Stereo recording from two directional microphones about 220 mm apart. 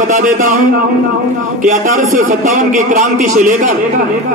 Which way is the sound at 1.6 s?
35° right (ahead or behind).